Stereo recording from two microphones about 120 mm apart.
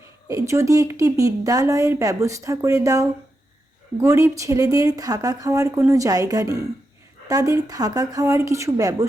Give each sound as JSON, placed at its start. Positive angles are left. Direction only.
{"t": 0.3, "sound": "a woman's voice", "side_deg": -25}